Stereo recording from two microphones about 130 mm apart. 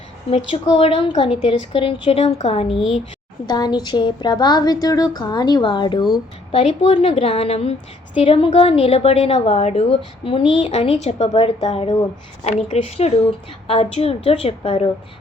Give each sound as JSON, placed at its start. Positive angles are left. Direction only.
{"t": 0.3, "sound": "a woman's voice", "side_deg": 50}
{"t": 3.5, "sound": "speech", "side_deg": 35}
{"t": 6.5, "sound": "a woman's voice", "side_deg": 55}
{"t": 10.2, "sound": "a woman's voice", "side_deg": 45}